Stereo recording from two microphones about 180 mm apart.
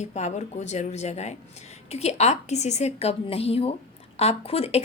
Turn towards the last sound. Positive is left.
turn(degrees=35)  # may be behind; listen again after turning